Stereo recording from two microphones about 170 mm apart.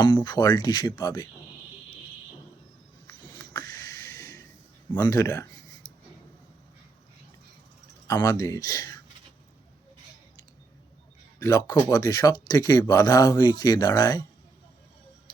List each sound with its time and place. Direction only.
0.3 s speech: 25° left (ahead or behind)
3.1 s a sound: 25° left (ahead or behind)
5.0 s speech: 20° left (ahead or behind)
8.0 s speech: 20° left (ahead or behind)
11.3 s speech: 20° left (ahead or behind)